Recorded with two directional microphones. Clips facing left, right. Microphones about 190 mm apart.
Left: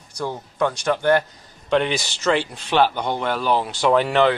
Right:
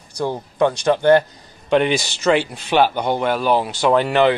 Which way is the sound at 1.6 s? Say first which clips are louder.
Right 3 dB; 15° right (ahead or behind).